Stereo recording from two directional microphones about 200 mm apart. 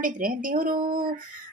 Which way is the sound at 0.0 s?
45° right (ahead or behind).